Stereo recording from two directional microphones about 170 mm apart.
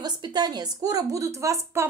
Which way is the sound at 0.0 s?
25° right (ahead or behind).